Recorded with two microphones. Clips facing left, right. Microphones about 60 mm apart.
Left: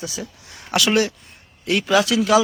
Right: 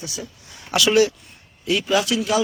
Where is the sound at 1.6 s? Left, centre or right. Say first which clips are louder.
Left 2 dB; left.